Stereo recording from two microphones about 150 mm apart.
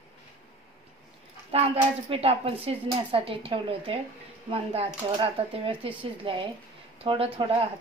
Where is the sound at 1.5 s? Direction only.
40° right (ahead or behind).